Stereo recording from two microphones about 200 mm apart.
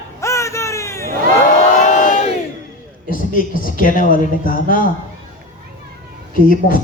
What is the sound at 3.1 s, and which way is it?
A woman's voice, 45° left (ahead or behind).